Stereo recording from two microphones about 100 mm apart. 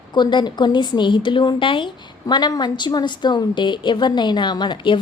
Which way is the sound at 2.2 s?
40° left (ahead or behind).